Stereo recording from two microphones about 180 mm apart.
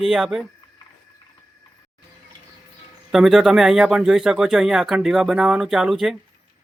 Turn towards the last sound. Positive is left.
turn(degrees=0)  # may be behind; listen again after turning